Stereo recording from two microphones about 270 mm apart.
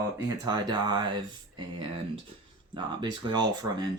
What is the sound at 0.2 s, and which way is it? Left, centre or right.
Speech, centre.